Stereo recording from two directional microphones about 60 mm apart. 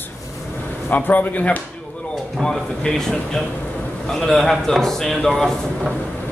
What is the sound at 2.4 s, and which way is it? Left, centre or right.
A man's voice, centre.